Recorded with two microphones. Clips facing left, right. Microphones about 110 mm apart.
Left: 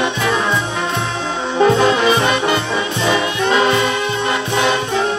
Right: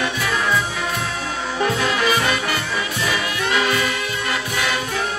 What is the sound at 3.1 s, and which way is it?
Music, 25° left (ahead or behind).